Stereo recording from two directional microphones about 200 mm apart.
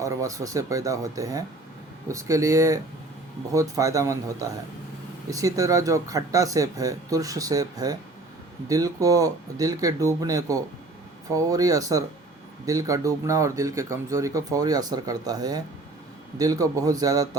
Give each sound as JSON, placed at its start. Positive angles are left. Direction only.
{"t": 0.0, "sound": "speech", "side_deg": -15}